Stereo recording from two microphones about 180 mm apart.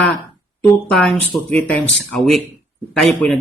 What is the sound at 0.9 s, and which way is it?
Speech, 5° left (ahead or behind).